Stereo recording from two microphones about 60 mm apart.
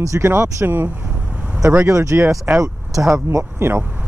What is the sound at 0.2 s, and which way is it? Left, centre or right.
Speech, right.